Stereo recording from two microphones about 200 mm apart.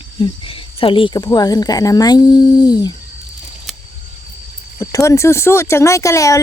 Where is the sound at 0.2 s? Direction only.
25° left (ahead or behind).